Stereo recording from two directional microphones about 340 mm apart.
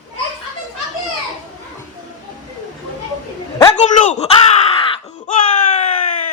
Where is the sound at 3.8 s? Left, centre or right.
Left.